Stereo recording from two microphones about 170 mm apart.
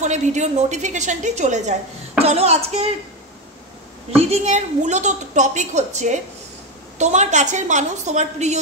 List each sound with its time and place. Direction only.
0.0 s a woman's voice: 45° right (ahead or behind)
4.2 s a woman's voice: 40° right (ahead or behind)